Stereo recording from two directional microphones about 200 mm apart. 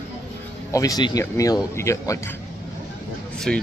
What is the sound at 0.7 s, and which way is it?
Speech, 15° left (ahead or behind).